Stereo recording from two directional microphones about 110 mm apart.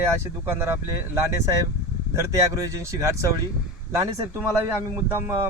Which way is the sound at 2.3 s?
25° right (ahead or behind).